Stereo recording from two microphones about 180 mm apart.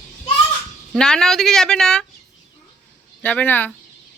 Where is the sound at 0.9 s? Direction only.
5° left (ahead or behind).